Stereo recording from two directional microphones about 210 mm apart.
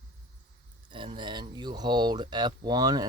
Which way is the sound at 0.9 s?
25° right (ahead or behind).